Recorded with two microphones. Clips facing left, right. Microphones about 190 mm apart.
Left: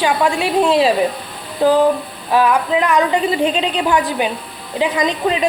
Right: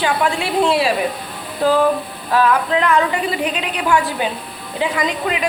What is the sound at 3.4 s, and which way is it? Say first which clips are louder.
A woman's voice: left 5 dB; 25° left (ahead or behind).